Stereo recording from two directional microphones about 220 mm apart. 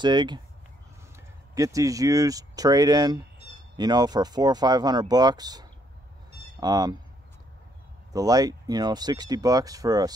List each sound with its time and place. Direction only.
0.0 s speech: 20° right (ahead or behind)
8.1 s speech: 15° right (ahead or behind)